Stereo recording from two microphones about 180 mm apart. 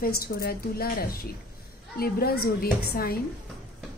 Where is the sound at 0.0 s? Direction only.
55° left (ahead or behind).